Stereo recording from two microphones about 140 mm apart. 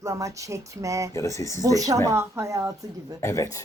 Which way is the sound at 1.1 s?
20° left (ahead or behind).